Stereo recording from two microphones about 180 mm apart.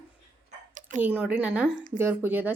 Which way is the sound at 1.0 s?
10° right (ahead or behind).